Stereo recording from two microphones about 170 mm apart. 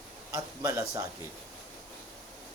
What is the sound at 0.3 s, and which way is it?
Speech, 20° right (ahead or behind).